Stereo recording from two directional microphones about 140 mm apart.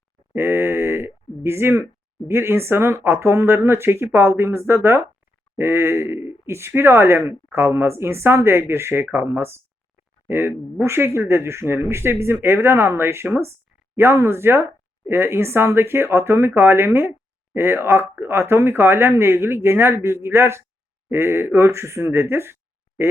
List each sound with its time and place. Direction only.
0.3 s speech: 15° right (ahead or behind)